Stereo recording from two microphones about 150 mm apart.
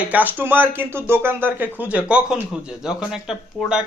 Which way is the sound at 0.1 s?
10° right (ahead or behind).